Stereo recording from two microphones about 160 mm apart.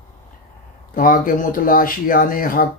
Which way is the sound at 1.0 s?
60° left (ahead or behind).